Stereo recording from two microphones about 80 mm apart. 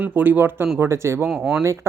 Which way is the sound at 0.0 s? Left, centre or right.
Right.